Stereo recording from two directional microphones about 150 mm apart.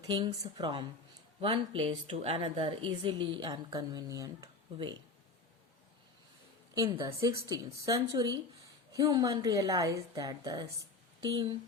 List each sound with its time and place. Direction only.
0.1 s a woman's voice: 30° right (ahead or behind)
6.9 s a woman's voice: 25° right (ahead or behind)